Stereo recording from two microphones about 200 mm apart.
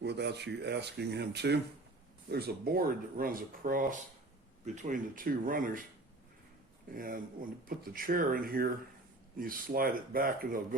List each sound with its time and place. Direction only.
0.0 s speech: 60° right (ahead or behind)
2.3 s speech: 45° right (ahead or behind)
6.9 s speech: 45° right (ahead or behind)